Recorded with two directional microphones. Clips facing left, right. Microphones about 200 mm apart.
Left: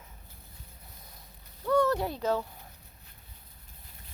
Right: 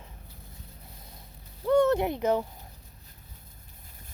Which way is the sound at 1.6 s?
25° right (ahead or behind).